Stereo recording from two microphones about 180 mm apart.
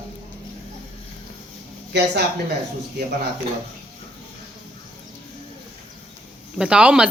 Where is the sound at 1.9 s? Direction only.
70° right (ahead or behind).